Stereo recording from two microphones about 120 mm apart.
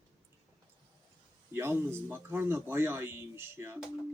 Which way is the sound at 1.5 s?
20° right (ahead or behind).